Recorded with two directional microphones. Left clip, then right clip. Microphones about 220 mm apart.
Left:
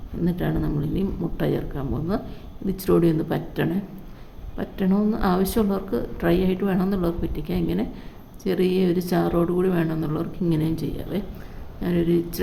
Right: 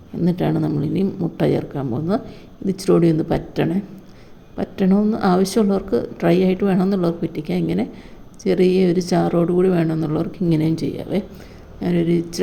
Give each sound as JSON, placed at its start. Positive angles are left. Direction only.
{"t": 0.2, "sound": "speech", "side_deg": -25}